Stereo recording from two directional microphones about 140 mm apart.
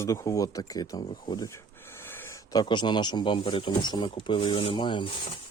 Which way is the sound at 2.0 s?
15° left (ahead or behind).